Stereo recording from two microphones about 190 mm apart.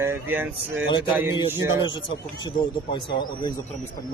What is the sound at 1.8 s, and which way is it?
Speech, 25° left (ahead or behind).